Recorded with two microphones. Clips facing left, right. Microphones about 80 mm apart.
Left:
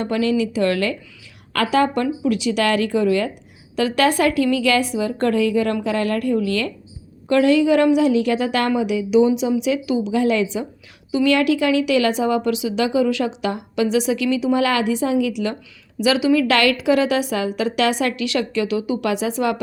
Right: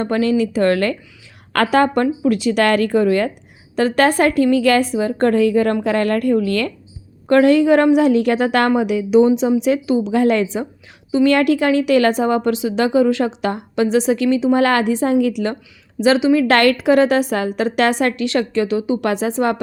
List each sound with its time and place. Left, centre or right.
0.0 s a woman's voice: right
16.0 s a woman's voice: right
16.5 s a woman's voice: right